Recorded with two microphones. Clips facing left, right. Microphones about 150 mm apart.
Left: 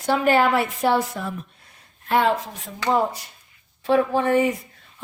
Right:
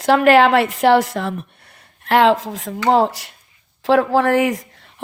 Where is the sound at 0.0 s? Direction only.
90° right.